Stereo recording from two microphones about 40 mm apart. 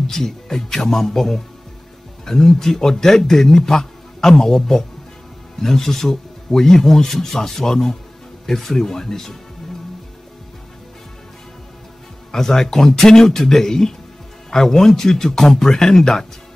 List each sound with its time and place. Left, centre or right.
0.0 s a man's voice: centre
12.3 s a man's voice: centre